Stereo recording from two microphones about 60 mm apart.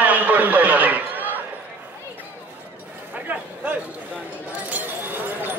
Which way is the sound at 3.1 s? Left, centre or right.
Right.